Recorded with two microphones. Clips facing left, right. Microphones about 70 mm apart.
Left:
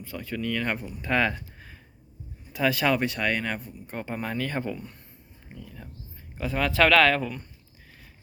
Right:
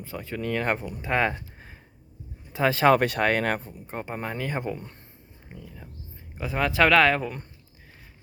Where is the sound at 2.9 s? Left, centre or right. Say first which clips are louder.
Right 4 dB; right.